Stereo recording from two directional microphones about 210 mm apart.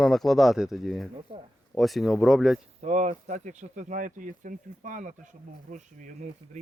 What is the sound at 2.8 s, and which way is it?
Speech, 35° right (ahead or behind).